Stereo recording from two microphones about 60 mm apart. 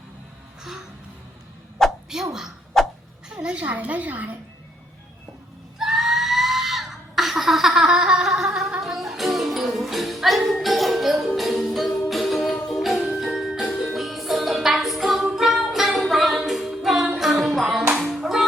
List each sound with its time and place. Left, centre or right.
2.1 s speech: centre
2.8 s a sound: centre
3.2 s a woman's voice: centre
5.8 s screaming: centre
8.8 s music: centre
17.9 s clapping: centre